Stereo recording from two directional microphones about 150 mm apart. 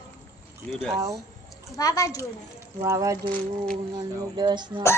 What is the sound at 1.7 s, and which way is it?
Speech, 25° left (ahead or behind).